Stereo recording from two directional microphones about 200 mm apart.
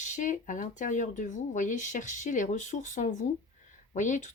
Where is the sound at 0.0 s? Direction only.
40° left (ahead or behind).